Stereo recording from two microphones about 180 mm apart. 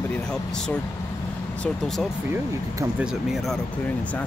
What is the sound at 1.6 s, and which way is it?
Speech, 5° left (ahead or behind).